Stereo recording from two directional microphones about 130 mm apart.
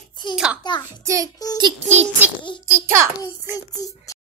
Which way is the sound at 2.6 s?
15° right (ahead or behind).